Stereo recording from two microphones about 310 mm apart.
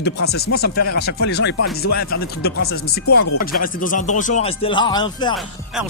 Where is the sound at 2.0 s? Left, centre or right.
Left; by 5.3 s centre.